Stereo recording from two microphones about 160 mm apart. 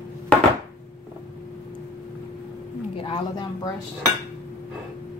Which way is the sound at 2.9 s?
30° left (ahead or behind).